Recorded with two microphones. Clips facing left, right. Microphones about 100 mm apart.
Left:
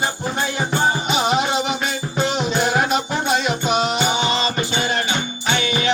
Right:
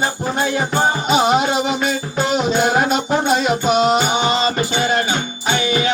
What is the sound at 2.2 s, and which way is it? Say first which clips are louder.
Music: right 4 dB; 45° right (ahead or behind).